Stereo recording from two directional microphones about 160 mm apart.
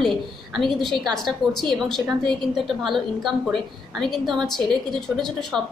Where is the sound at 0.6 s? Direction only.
Centre (ahead or behind).